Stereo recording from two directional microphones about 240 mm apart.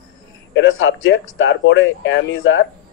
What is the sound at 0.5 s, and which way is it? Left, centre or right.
Speech, left.